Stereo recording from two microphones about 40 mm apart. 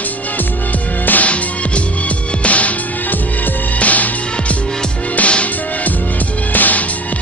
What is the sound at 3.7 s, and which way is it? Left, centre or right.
Music, left.